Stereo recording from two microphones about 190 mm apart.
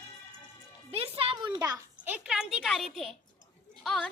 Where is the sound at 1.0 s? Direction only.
30° right (ahead or behind); by 3.1 s centre (ahead or behind).